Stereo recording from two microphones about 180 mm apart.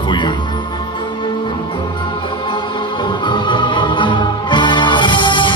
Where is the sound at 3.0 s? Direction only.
25° left (ahead or behind).